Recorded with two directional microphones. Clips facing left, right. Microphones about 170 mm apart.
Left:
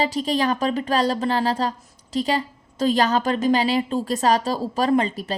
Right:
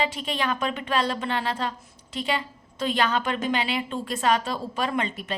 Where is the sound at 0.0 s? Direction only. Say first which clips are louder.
Left 6 dB; 35° left (ahead or behind).